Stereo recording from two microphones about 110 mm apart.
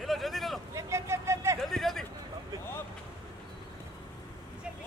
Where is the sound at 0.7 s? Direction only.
25° right (ahead or behind).